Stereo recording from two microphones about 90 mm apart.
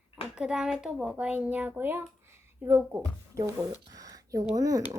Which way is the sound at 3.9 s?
45° right (ahead or behind).